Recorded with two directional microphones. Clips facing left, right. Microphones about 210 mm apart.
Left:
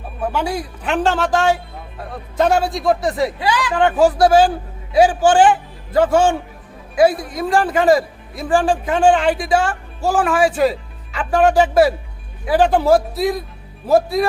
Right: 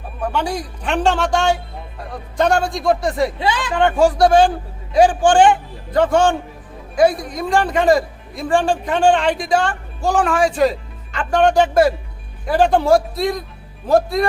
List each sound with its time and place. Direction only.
0.2 s speech: 5° left (ahead or behind)
3.3 s speech: 25° right (ahead or behind)
3.7 s speech: centre (ahead or behind)